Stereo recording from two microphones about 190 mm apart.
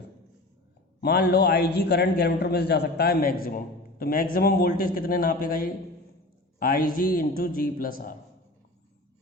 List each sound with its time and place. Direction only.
1.0 s a man's voice: 60° left (ahead or behind)